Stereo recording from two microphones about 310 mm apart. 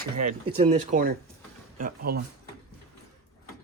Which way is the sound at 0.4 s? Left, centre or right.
Right.